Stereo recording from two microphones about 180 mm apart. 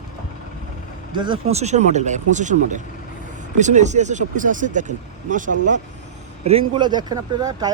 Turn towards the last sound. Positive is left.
turn(degrees=-20)  # may be behind; listen again after turning